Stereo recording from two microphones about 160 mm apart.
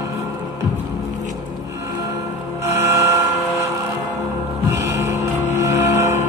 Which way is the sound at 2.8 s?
15° right (ahead or behind).